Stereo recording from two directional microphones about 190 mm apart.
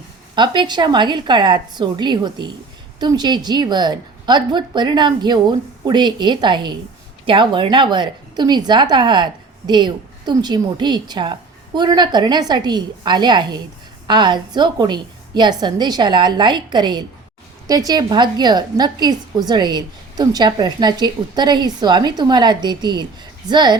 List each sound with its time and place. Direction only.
0.3 s a woman's voice: 25° right (ahead or behind)